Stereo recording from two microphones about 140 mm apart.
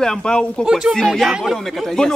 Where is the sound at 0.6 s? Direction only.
5° right (ahead or behind).